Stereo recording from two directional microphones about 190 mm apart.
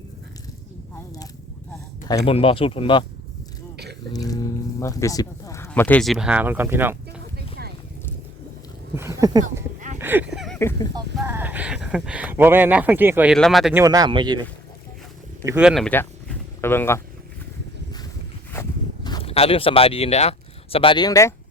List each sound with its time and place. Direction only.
0.9 s a sound: 20° left (ahead or behind)
2.0 s speech: 25° left (ahead or behind)
4.1 s speech: 20° left (ahead or behind); by 6.9 s 10° right (ahead or behind)
9.0 s speech: 15° right (ahead or behind)
10.0 s a sound: 10° right (ahead or behind)
10.3 s a sound: centre (ahead or behind)
10.6 s speech: 15° left (ahead or behind)
11.3 s speech: 10° right (ahead or behind)
13.3 s speech: centre (ahead or behind)
13.7 s speech: 20° right (ahead or behind)
15.4 s speech: 10° right (ahead or behind); by 17.0 s 10° left (ahead or behind)
19.0 s speech: 25° left (ahead or behind)